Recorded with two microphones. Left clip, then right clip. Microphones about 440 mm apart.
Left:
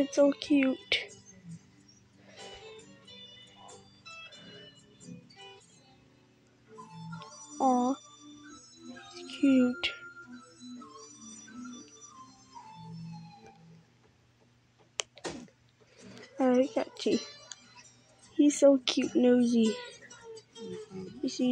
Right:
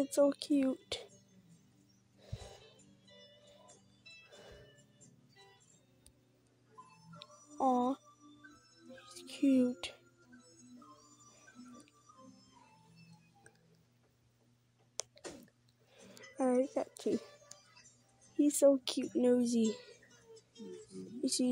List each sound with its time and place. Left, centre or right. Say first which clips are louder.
0.0 s a child's voice: left 5 dB; right
7.2 s music: left 5 dB; right
9.0 s music: left 5 dB; right
16.0 s music: left 6 dB; right
18.4 s a child's voice: left 5 dB; right
21.2 s speech: left 2 dB; right